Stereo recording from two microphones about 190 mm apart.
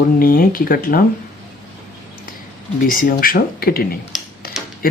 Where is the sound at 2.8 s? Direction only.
50° left (ahead or behind).